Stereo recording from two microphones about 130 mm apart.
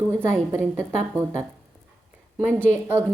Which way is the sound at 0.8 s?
20° right (ahead or behind).